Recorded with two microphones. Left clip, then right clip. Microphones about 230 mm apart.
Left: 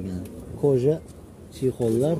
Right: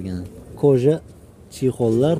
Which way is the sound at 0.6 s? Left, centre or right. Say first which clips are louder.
Right 5 dB; right.